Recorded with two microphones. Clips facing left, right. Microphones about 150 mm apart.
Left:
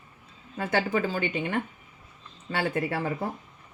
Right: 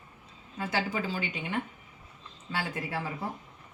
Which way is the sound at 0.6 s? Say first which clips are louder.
Left 5 dB; 55° left (ahead or behind).